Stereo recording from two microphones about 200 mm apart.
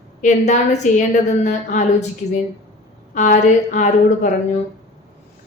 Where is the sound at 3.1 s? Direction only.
35° left (ahead or behind).